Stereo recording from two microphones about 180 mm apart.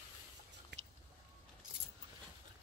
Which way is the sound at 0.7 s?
75° right (ahead or behind).